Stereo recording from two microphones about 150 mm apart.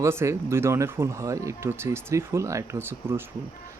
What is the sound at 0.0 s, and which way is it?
Speech, 20° right (ahead or behind).